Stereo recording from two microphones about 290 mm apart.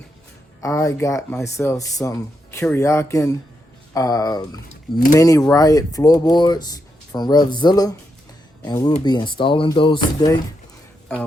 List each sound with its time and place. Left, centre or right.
0.6 s speech: centre